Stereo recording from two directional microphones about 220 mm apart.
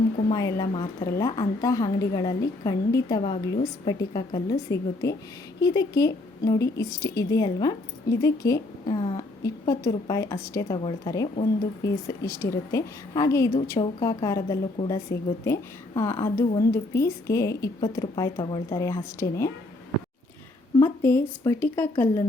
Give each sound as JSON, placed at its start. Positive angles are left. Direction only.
{"t": 0.3, "sound": "a woman's voice", "side_deg": 15}
{"t": 20.7, "sound": "a woman's voice", "side_deg": 10}